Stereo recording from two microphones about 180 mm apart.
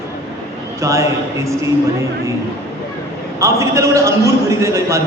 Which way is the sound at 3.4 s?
15° right (ahead or behind).